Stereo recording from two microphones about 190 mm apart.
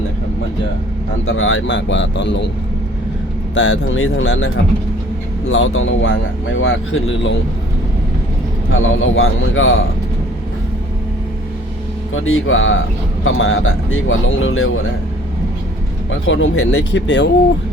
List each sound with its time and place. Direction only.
1.3 s speech: 90° left; by 2.5 s 65° left (ahead or behind)
3.5 s speech: 80° left
8.8 s speech: 90° left
12.1 s speech: 90° left
16.0 s speech: 90° left; by 17.2 s 70° left (ahead or behind)